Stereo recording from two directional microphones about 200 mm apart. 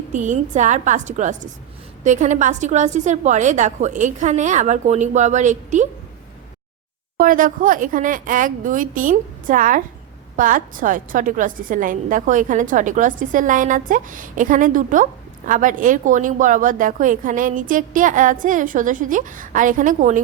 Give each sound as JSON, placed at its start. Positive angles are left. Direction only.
{"t": 0.1, "sound": "a woman's voice", "side_deg": -40}
{"t": 7.2, "sound": "a woman's voice", "side_deg": -45}